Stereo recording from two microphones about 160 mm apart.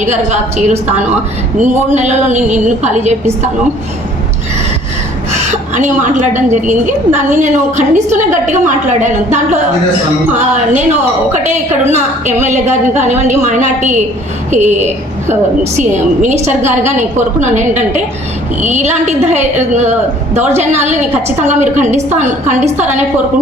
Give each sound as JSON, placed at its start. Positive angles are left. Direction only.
{"t": 0.0, "sound": "a woman's voice", "side_deg": -50}
{"t": 5.7, "sound": "a woman's voice", "side_deg": -50}
{"t": 15.8, "sound": "a woman's voice", "side_deg": -50}